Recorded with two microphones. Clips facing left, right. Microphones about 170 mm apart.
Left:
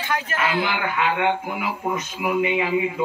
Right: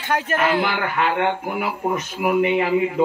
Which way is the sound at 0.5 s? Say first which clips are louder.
Right 2 dB; 45° right (ahead or behind).